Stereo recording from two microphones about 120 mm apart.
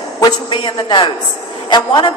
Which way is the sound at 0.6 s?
40° left (ahead or behind).